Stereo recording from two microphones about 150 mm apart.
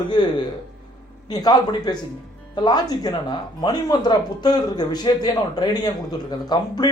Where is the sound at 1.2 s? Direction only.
25° left (ahead or behind).